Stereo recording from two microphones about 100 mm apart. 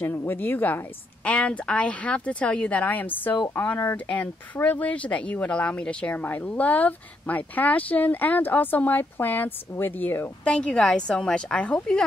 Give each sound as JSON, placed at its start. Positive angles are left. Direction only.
{"t": 0.0, "sound": "speech", "side_deg": 20}